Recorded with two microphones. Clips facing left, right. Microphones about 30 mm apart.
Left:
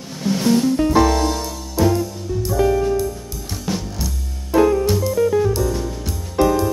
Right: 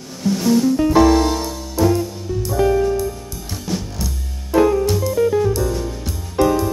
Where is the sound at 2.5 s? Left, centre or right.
Centre.